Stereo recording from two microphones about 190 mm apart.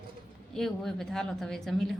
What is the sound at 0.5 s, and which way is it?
A woman's voice, centre (ahead or behind).